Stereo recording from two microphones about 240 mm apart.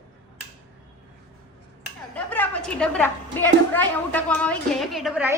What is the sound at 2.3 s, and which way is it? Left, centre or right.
A woman's voice, centre.